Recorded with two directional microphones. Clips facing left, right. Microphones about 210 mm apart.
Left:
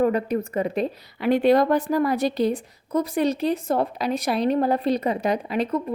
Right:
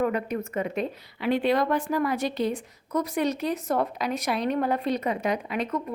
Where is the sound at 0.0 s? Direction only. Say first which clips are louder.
Left 5 dB; 35° left (ahead or behind).